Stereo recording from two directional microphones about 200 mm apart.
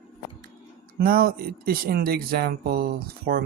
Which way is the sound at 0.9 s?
45° right (ahead or behind).